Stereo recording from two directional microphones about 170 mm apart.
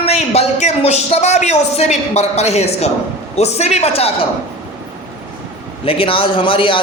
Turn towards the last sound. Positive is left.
turn(degrees=30)  # may be behind; listen again after turning